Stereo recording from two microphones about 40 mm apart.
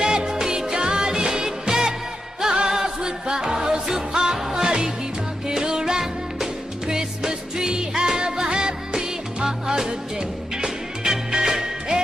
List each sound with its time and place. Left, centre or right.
0.0 s music: centre